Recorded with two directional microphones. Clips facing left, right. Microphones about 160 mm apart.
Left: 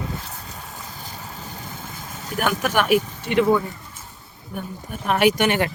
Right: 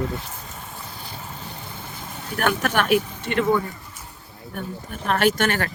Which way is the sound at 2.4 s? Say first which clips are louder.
Even; 10° left (ahead or behind).